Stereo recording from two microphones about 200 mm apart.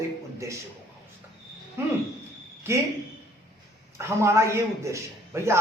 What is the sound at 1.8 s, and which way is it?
Speech, 10° right (ahead or behind).